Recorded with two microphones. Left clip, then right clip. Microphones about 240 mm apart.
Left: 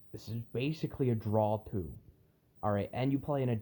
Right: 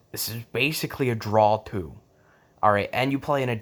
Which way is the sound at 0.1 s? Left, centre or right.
Centre.